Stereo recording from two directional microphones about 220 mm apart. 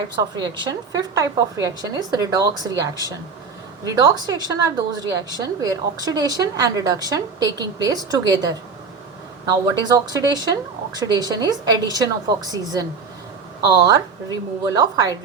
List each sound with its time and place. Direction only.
0.2 s a woman's voice: 20° right (ahead or behind)